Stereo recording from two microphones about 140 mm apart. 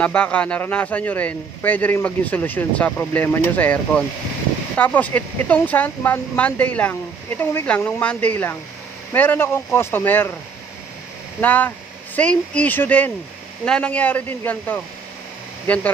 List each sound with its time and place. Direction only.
0.0 s speech: 10° left (ahead or behind)
11.4 s speech: 10° left (ahead or behind)